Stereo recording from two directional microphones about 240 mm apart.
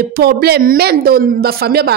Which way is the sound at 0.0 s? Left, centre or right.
Right.